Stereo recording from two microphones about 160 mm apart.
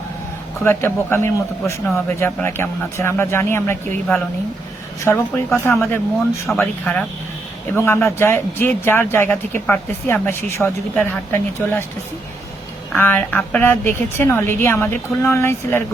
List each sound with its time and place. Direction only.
0.6 s a woman's voice: 15° left (ahead or behind)
5.0 s a woman's voice: 15° left (ahead or behind)
5.8 s speech: 5° left (ahead or behind)
7.8 s a woman's voice: 15° left (ahead or behind)
12.9 s a woman's voice: 10° left (ahead or behind)